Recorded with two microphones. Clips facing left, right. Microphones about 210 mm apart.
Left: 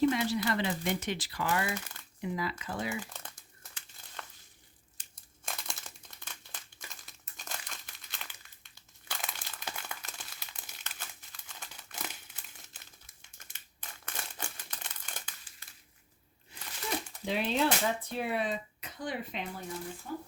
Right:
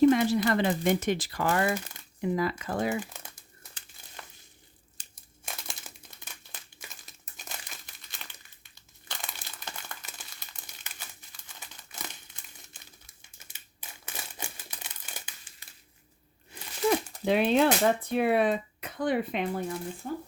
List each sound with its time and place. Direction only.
0.0 s speech: 50° right (ahead or behind)
4.2 s a sound: 5° right (ahead or behind)
5.0 s crumpling: 35° right (ahead or behind)
5.5 s crumpling: centre (ahead or behind)
14.0 s crumpling: 10° right (ahead or behind)
17.2 s speech: 60° right (ahead or behind)
20.0 s speech: 45° right (ahead or behind)